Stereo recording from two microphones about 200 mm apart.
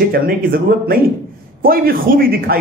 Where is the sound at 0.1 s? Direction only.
45° right (ahead or behind).